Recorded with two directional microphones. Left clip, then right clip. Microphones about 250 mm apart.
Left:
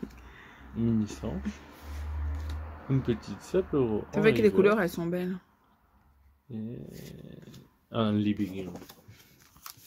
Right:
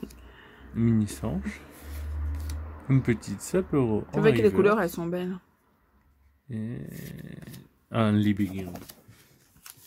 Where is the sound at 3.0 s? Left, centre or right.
Right.